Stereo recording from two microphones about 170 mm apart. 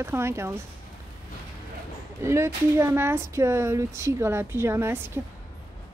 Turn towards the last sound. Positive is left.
turn(degrees=-15)  # may be behind; listen again after turning